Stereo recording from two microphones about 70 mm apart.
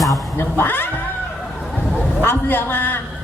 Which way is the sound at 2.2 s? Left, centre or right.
Left.